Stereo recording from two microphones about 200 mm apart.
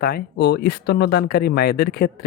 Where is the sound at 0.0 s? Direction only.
55° left (ahead or behind).